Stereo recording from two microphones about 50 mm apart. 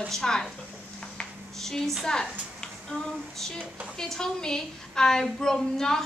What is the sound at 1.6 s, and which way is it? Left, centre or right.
A woman's voice, centre.